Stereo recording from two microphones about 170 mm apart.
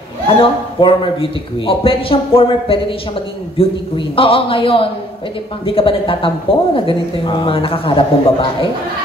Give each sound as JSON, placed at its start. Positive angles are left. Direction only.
{"t": 0.3, "sound": "speech", "side_deg": 30}